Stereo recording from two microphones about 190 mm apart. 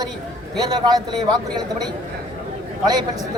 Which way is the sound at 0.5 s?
20° right (ahead or behind).